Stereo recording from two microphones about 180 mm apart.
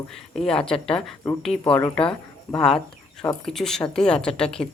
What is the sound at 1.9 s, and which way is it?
Speech, 30° left (ahead or behind).